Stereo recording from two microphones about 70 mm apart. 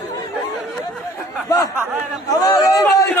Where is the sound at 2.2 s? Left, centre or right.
Left.